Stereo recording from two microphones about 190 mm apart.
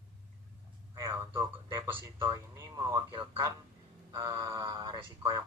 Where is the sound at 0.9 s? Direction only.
15° right (ahead or behind).